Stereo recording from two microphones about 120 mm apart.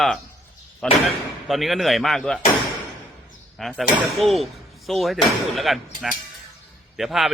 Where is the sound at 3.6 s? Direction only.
Centre (ahead or behind).